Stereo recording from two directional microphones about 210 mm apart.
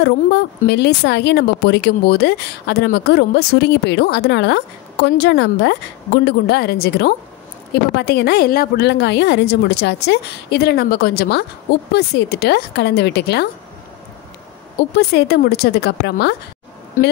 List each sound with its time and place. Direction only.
0.0 s speech: 55° left (ahead or behind)
15.0 s speech: 50° left (ahead or behind)